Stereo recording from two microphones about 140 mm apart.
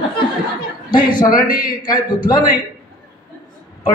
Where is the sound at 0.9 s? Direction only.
30° left (ahead or behind).